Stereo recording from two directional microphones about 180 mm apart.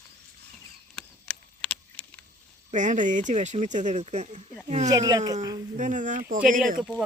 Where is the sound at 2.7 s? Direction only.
45° right (ahead or behind).